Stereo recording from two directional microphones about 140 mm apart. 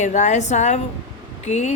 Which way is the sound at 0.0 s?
60° left (ahead or behind).